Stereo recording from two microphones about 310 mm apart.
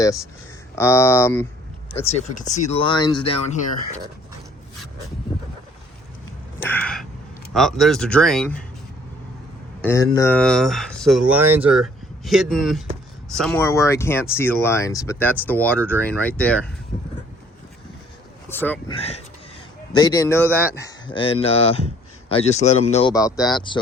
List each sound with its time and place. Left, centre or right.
0.8 s speech: centre
1.9 s speech: left
6.7 s speech: centre
9.8 s speech: centre
18.4 s speech: centre
18.9 s speech: centre